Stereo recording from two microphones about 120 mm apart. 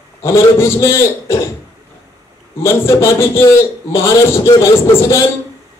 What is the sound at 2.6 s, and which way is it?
A man's voice, 20° left (ahead or behind).